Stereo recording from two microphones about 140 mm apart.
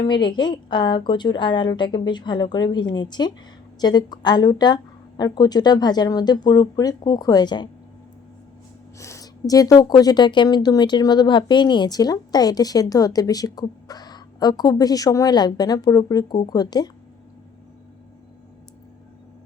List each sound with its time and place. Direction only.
0.0 s a woman's voice: 35° left (ahead or behind)
9.0 s a woman's voice: 20° left (ahead or behind)